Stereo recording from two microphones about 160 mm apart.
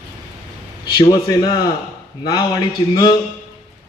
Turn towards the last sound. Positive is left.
turn(degrees=25)  # may be behind; listen again after turning